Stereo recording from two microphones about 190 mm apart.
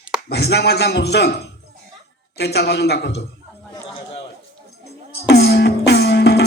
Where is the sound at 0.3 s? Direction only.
60° left (ahead or behind).